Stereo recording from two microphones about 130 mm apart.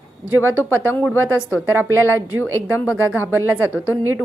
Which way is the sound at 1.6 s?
15° right (ahead or behind).